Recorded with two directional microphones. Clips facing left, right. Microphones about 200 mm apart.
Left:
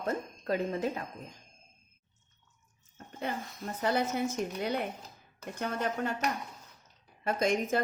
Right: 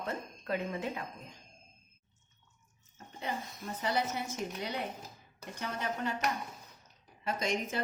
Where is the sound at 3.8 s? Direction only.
50° left (ahead or behind).